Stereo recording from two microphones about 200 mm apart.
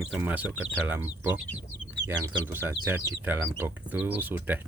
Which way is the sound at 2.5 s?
10° right (ahead or behind).